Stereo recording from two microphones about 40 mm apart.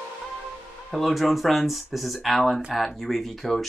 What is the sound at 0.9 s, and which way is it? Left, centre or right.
Speech, centre.